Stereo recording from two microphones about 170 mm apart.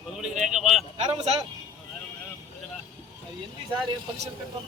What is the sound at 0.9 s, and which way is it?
Speech, 40° right (ahead or behind).